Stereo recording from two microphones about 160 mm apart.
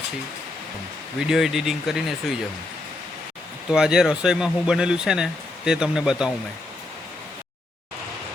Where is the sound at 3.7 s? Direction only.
5° right (ahead or behind).